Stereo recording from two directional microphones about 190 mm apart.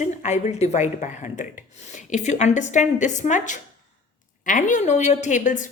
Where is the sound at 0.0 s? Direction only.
40° left (ahead or behind).